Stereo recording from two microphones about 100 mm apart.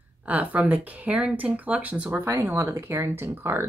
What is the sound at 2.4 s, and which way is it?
Speech, 25° right (ahead or behind).